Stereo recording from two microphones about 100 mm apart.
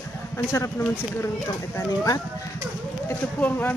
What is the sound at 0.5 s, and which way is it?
Speech, 25° left (ahead or behind).